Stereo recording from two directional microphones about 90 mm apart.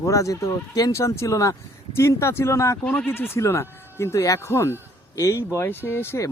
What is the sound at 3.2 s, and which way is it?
Speech, 25° left (ahead or behind).